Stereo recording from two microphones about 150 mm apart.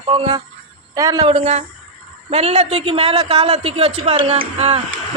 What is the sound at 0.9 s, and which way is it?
Speech, 25° right (ahead or behind).